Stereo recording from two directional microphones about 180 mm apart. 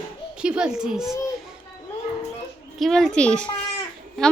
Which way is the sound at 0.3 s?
5° right (ahead or behind).